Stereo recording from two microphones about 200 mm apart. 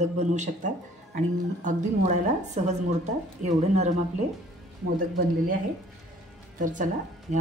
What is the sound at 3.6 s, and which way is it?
Speech, 35° right (ahead or behind).